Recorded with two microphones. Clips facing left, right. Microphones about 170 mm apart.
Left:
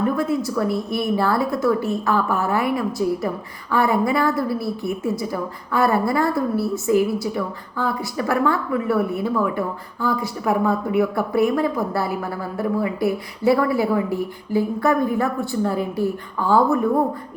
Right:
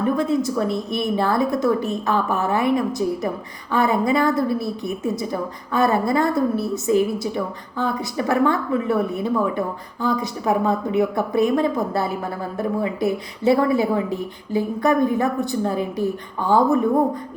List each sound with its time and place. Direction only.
0.2 s a woman's voice: 20° right (ahead or behind)